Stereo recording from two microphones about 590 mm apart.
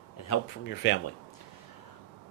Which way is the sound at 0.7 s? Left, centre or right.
Centre.